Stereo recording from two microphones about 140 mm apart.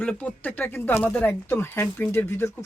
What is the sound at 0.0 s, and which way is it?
Speech, 10° left (ahead or behind).